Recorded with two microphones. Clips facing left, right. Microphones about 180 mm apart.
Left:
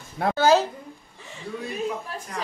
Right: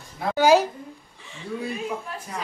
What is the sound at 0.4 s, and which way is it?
Speech, 10° right (ahead or behind).